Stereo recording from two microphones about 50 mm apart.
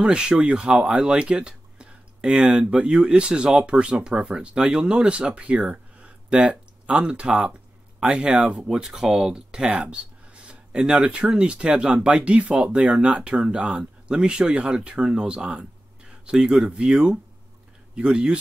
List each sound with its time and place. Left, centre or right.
0.0 s speech: right
8.7 s speech: centre